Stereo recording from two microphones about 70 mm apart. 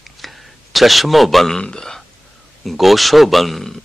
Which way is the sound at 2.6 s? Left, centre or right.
Centre.